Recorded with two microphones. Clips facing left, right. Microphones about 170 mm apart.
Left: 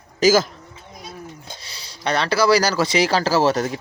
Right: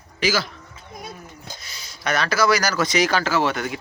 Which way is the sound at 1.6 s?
30° left (ahead or behind).